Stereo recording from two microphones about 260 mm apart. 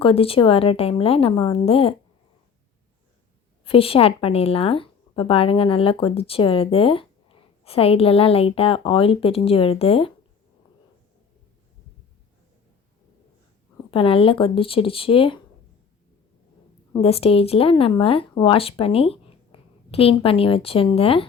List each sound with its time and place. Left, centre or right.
0.0 s speech: left
3.6 s speech: left
13.9 s speech: left
16.9 s speech: left